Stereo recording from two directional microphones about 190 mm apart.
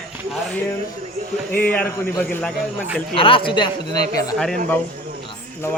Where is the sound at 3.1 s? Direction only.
30° left (ahead or behind).